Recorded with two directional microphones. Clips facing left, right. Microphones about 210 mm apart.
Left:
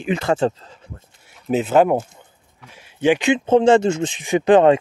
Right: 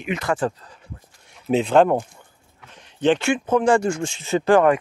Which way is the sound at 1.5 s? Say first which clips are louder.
Left 1 dB; 5° left (ahead or behind).